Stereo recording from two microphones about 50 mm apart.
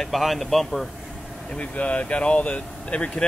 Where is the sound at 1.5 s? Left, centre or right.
Left.